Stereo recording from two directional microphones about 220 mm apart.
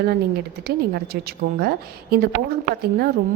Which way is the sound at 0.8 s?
45° right (ahead or behind).